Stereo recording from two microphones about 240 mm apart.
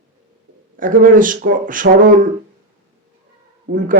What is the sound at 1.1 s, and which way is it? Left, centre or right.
A man's voice, right.